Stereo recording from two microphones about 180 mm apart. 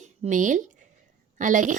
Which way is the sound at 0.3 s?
45° right (ahead or behind).